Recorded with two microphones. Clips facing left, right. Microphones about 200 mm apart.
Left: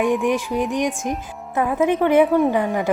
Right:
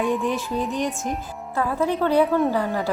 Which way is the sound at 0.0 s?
15° left (ahead or behind).